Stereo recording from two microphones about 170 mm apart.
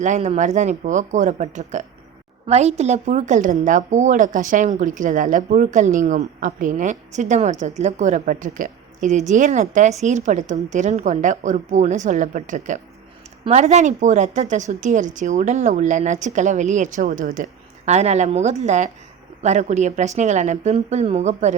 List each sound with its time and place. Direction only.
0.0 s a woman's voice: 45° right (ahead or behind)